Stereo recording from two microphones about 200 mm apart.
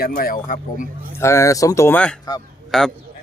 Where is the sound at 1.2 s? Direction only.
15° left (ahead or behind).